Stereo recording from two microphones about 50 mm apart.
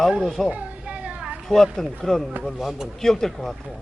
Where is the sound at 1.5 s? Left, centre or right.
Centre.